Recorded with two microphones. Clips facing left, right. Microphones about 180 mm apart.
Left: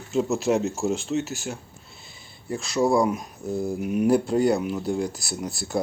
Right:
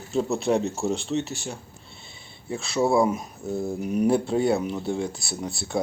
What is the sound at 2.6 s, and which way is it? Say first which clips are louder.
Speech: even; centre (ahead or behind).